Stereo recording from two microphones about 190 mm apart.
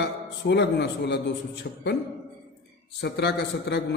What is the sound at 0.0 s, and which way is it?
A man's voice, 60° left (ahead or behind).